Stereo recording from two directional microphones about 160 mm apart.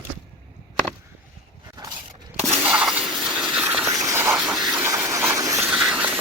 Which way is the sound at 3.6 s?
15° right (ahead or behind).